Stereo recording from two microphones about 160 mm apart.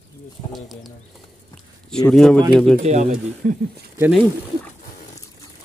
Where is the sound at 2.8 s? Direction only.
45° right (ahead or behind).